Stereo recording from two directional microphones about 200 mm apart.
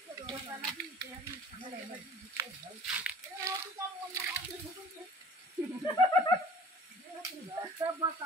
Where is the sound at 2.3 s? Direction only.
15° right (ahead or behind).